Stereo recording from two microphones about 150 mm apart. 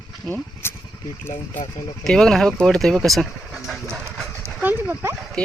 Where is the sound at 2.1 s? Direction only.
5° left (ahead or behind).